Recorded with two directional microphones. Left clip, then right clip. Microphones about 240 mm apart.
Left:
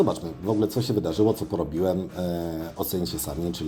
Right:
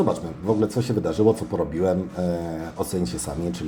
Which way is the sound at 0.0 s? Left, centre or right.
Left.